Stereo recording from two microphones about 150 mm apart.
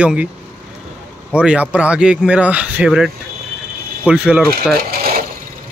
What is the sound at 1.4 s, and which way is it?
Speech, 5° right (ahead or behind).